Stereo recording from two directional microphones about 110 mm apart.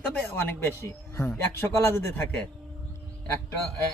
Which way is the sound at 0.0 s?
20° left (ahead or behind).